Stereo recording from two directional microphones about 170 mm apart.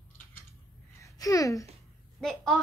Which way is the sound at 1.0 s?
20° left (ahead or behind).